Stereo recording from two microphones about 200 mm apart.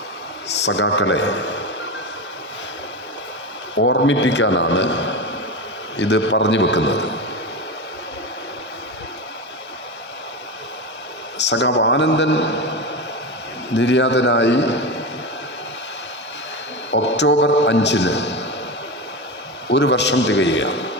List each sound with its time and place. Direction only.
0.5 s a man's voice: 60° left (ahead or behind)
3.8 s a man's voice: 65° left (ahead or behind)
11.3 s a man's voice: 60° left (ahead or behind)
13.7 s a man's voice: 65° left (ahead or behind)
16.9 s a man's voice: 60° left (ahead or behind)
19.6 s a man's voice: 60° left (ahead or behind)